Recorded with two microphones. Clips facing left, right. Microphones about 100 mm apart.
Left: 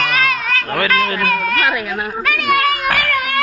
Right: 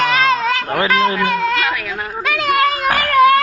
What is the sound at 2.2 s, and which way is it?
Children playing, 25° right (ahead or behind).